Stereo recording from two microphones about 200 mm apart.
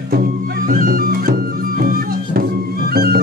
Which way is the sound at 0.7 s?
45° right (ahead or behind).